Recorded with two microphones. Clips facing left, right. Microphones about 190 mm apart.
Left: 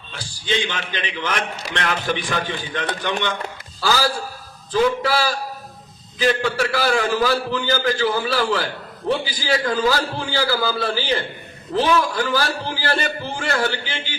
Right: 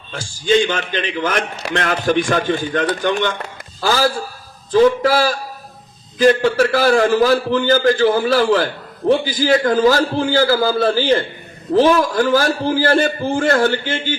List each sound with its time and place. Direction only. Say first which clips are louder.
0.1 s a man's voice: right 9 dB; 45° right (ahead or behind)